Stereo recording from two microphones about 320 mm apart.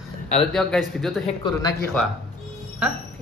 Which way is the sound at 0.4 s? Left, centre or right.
Centre.